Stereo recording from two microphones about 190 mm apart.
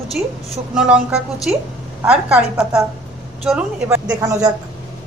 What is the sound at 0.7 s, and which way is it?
A woman's voice, 5° right (ahead or behind).